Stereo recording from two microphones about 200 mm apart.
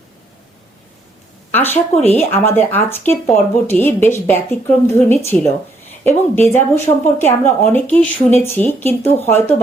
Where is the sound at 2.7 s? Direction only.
10° left (ahead or behind).